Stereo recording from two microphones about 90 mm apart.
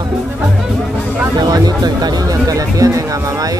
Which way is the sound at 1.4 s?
50° right (ahead or behind).